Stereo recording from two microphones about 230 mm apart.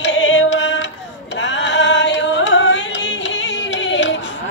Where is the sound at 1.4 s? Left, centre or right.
Left.